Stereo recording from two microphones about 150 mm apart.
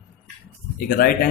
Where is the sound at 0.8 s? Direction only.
70° left (ahead or behind).